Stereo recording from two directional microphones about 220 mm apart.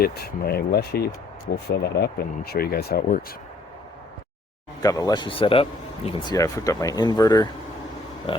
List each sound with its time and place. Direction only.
0.0 s speech: 45° left (ahead or behind)
4.8 s a man's voice: 15° left (ahead or behind)